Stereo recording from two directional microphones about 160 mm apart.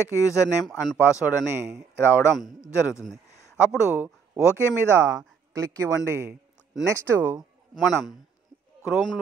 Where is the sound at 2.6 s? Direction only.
20° left (ahead or behind).